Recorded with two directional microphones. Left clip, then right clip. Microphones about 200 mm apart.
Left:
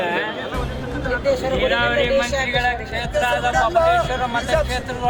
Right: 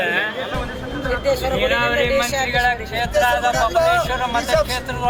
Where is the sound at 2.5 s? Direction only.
5° left (ahead or behind).